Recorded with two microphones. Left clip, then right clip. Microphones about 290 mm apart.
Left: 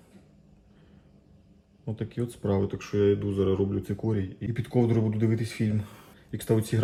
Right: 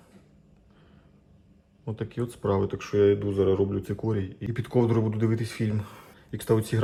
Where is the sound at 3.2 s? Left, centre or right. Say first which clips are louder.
Right 3 dB; right.